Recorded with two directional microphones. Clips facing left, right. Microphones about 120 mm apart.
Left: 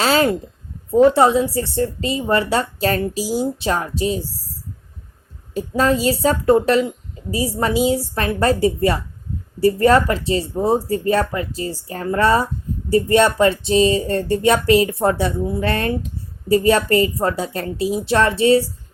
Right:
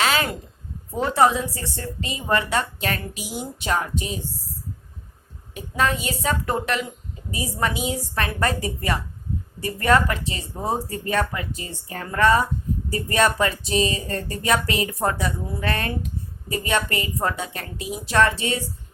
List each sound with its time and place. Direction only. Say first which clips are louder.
0.0 s a sound: left 6 dB; 30° left (ahead or behind)
1.1 s a woman's voice: left 4 dB; 30° left (ahead or behind)
5.5 s a woman's voice: left 6 dB; 35° left (ahead or behind)